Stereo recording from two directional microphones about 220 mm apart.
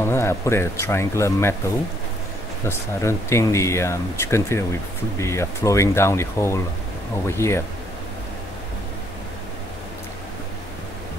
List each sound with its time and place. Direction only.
0.0 s speech: 10° left (ahead or behind)
2.6 s speech: 10° left (ahead or behind)